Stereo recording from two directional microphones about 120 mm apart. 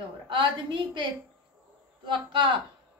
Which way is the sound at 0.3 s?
45° right (ahead or behind).